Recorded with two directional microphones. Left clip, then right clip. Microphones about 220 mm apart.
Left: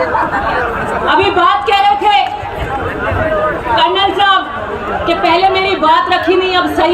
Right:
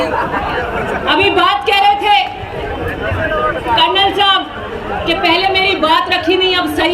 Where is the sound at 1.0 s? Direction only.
50° right (ahead or behind).